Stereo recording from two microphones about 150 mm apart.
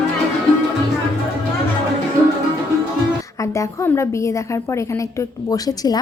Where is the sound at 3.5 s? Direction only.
20° left (ahead or behind).